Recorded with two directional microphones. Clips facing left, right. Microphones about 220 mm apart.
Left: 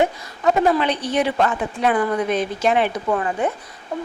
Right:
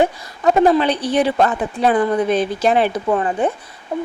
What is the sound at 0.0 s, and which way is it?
Speech, 35° right (ahead or behind).